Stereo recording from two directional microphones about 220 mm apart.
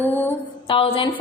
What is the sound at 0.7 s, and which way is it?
Speech, 25° left (ahead or behind).